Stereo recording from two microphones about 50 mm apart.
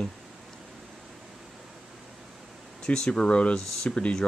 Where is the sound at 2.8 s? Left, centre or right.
Centre.